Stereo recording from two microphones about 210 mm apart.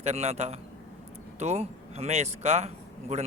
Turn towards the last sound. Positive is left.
turn(degrees=-30)  # may be behind; listen again after turning